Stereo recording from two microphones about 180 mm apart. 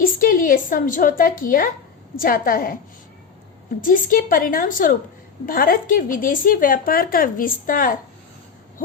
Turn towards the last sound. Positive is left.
turn(degrees=50)  # may be behind; listen again after turning